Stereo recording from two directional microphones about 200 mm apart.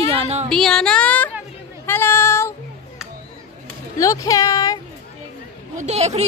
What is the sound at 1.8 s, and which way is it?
Child singing, 10° left (ahead or behind).